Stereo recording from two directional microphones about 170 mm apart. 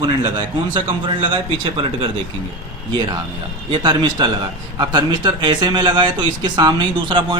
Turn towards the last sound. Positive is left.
turn(degrees=-25)  # may be behind; listen again after turning